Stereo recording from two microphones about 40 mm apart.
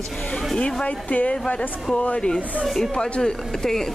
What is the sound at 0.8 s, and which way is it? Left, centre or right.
Speech, left.